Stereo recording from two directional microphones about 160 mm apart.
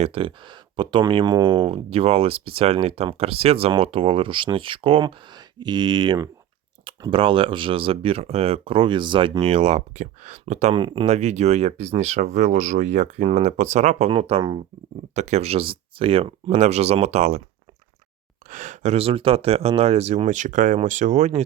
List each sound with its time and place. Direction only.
0.0 s speech: 35° right (ahead or behind)
10.8 s speech: 30° right (ahead or behind)
15.1 s speech: 45° right (ahead or behind)
18.4 s speech: 50° right (ahead or behind)